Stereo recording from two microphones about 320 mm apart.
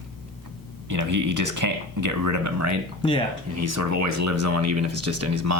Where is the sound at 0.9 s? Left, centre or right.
Right.